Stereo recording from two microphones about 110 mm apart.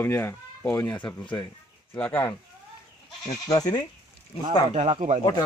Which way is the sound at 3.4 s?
35° left (ahead or behind).